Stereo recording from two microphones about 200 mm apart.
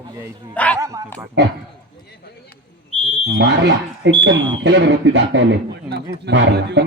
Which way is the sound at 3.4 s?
60° right (ahead or behind).